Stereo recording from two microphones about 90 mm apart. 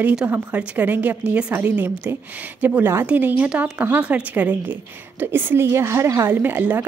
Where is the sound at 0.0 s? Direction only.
10° right (ahead or behind).